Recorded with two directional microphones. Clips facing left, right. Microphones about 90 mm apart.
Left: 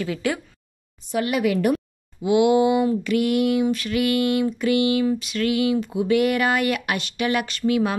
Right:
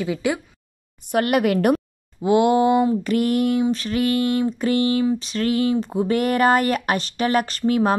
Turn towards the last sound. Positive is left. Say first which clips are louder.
# right 2 dB
turn(degrees=-40)  # may be behind; listen again after turning